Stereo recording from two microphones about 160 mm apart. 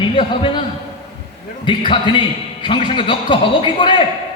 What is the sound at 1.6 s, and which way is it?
A man's voice, 30° left (ahead or behind).